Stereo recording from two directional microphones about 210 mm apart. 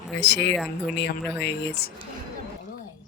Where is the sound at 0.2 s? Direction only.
55° left (ahead or behind).